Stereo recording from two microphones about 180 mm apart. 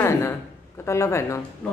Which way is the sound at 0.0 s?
15° left (ahead or behind).